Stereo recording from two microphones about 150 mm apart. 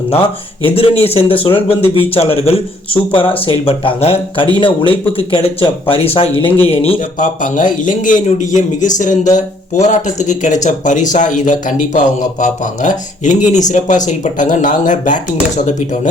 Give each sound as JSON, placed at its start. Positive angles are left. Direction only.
{"t": 0.6, "sound": "speech", "side_deg": 40}
{"t": 7.0, "sound": "a man's voice", "side_deg": 60}